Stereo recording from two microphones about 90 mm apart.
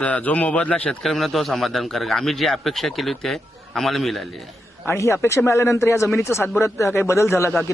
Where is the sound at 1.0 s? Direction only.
Centre (ahead or behind).